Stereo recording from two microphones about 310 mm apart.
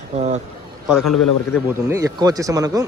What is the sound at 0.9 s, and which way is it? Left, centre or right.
Speech, centre.